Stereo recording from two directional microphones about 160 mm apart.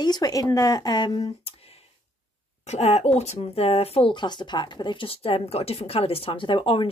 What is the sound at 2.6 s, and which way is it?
Speech, 40° left (ahead or behind).